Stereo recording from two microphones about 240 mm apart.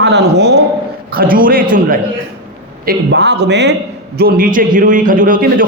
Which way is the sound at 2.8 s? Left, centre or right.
Right.